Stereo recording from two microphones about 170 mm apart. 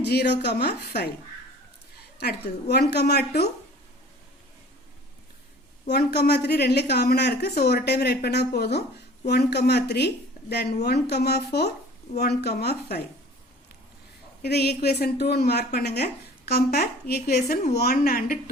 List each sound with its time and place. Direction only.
0.0 s a woman's voice: 70° left (ahead or behind)
2.1 s a woman's voice: 70° left (ahead or behind)
5.9 s a woman's voice: 70° left (ahead or behind)
14.4 s a woman's voice: 70° left (ahead or behind)